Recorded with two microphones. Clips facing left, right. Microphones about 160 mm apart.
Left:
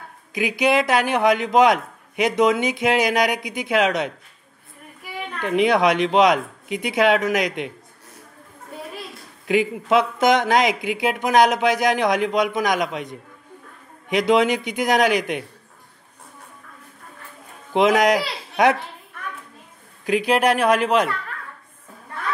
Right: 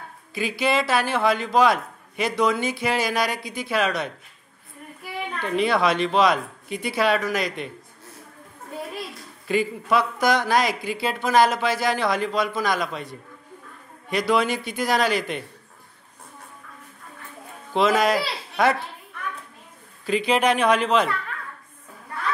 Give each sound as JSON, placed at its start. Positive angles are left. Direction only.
{"t": 0.3, "sound": "a man's voice", "side_deg": 15}
{"t": 5.4, "sound": "a man's voice", "side_deg": 20}
{"t": 9.5, "sound": "speech", "side_deg": 20}
{"t": 17.7, "sound": "speech", "side_deg": 15}
{"t": 20.1, "sound": "speech", "side_deg": 10}